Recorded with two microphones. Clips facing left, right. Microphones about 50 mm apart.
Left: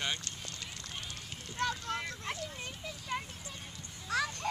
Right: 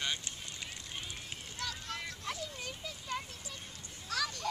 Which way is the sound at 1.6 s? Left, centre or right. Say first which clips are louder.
Left 7 dB; left.